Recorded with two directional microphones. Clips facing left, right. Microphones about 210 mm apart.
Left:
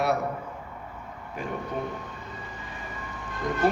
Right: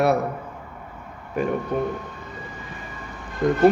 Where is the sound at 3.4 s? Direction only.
65° right (ahead or behind).